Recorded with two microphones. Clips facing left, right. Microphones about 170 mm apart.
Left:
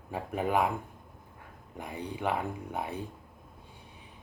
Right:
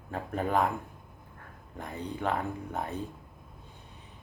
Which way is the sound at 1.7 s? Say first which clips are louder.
Right 1 dB; 10° left (ahead or behind).